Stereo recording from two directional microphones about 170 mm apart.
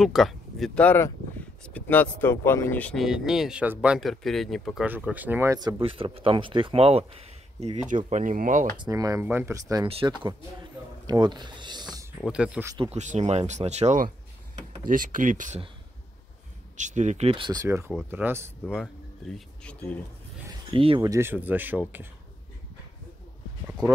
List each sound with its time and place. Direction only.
0.0 s speech: centre (ahead or behind)
4.8 s speech: 10° right (ahead or behind); by 8.7 s 50° right (ahead or behind)
8.7 s speech: 25° right (ahead or behind)
9.8 s speech: 30° right (ahead or behind)
11.1 s a sound: 25° right (ahead or behind)
12.3 s speech: 5° right (ahead or behind)
12.9 s speech: 45° right (ahead or behind)
16.7 s speech: 45° right (ahead or behind); by 18.5 s 15° right (ahead or behind)
19.3 s speech: 5° left (ahead or behind)
20.7 s speech: 30° right (ahead or behind)
21.1 s speech: 15° right (ahead or behind)